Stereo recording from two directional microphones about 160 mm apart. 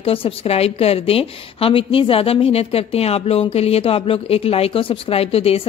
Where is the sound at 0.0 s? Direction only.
35° left (ahead or behind).